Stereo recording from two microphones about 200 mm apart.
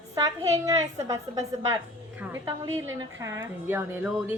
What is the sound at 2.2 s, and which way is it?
A woman's voice, 15° right (ahead or behind).